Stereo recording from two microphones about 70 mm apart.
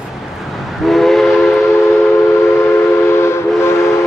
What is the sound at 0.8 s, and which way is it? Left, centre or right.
Steam whistle, centre.